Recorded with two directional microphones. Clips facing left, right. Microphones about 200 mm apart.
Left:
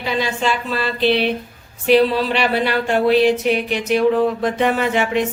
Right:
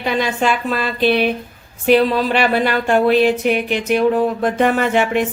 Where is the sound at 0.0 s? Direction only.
50° right (ahead or behind).